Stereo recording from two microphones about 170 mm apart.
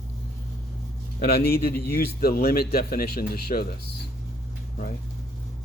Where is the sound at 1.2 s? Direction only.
60° left (ahead or behind).